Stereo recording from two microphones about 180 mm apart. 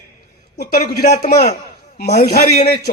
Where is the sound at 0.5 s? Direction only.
60° left (ahead or behind).